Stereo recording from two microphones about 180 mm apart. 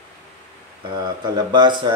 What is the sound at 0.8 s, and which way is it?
Speech, 25° right (ahead or behind).